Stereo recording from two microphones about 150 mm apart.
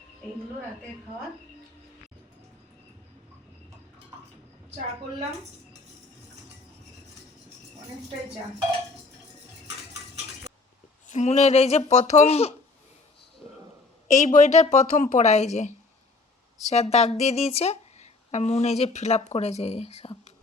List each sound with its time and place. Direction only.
9.6 s cutlery: 50° right (ahead or behind)
11.1 s speech: 50° left (ahead or behind)
14.2 s speech: 55° left (ahead or behind)